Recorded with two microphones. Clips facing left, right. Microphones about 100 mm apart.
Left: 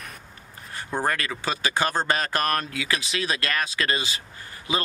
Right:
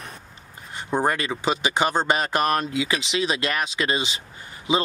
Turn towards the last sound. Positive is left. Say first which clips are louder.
# right 5 dB
turn(degrees=-25)  # may be behind; listen again after turning